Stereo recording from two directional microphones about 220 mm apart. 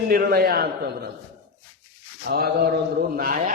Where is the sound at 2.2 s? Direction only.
45° right (ahead or behind).